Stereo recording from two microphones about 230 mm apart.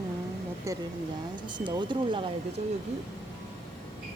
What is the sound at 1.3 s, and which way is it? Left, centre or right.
Speech, centre.